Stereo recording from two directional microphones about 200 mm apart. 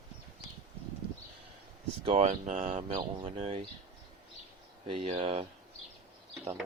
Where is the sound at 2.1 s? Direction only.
35° right (ahead or behind).